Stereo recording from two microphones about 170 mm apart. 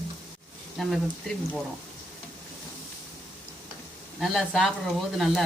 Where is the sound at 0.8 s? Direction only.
Centre (ahead or behind).